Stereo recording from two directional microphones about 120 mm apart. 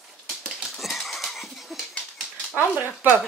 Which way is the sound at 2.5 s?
25° left (ahead or behind).